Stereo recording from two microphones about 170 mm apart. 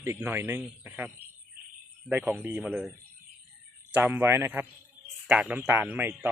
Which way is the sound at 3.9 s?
10° right (ahead or behind).